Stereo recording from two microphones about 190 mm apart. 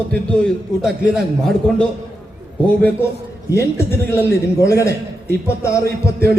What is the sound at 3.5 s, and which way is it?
A man's voice, 15° left (ahead or behind).